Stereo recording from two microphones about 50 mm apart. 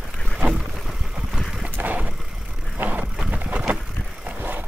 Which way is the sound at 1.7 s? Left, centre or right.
Right.